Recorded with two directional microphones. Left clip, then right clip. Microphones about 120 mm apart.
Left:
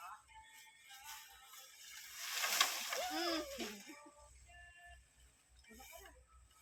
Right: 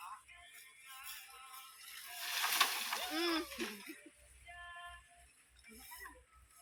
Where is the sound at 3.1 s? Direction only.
45° left (ahead or behind).